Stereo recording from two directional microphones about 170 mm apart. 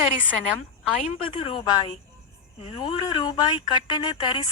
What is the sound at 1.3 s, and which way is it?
A woman's voice, 30° left (ahead or behind).